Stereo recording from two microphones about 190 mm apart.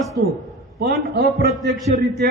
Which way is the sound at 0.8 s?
55° right (ahead or behind).